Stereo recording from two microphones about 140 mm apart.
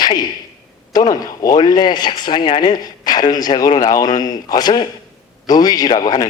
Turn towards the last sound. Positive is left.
turn(degrees=25)  # may be behind; listen again after turning